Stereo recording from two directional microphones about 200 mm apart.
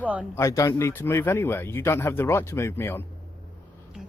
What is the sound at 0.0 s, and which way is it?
Speech, 5° right (ahead or behind).